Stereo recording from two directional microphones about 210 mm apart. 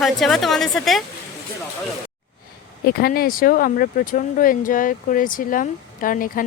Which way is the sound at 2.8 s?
50° left (ahead or behind).